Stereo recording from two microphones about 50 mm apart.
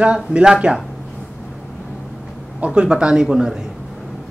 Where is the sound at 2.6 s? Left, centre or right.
Centre.